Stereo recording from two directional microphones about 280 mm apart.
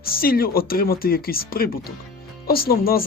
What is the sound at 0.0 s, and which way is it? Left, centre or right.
Speech, left.